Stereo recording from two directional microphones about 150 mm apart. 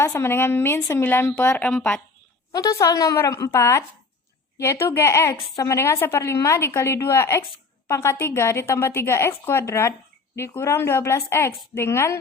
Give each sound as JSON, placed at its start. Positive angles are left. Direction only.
{"t": 0.0, "sound": "a woman's voice", "side_deg": 20}
{"t": 1.0, "sound": "a woman's voice", "side_deg": 15}
{"t": 2.6, "sound": "a woman's voice", "side_deg": 25}